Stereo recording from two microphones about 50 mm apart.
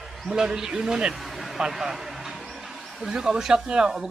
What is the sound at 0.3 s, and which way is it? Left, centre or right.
Speech, centre.